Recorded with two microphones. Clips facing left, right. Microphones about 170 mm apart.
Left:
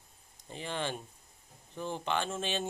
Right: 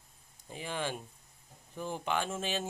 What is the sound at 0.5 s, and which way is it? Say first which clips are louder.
Speech: even; 5° right (ahead or behind).